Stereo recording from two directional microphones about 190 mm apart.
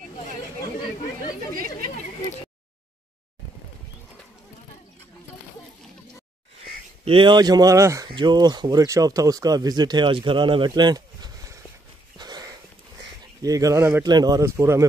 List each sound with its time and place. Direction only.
7.1 s speech: 25° right (ahead or behind)
12.2 s a sound: 20° right (ahead or behind)
13.4 s speech: 20° right (ahead or behind)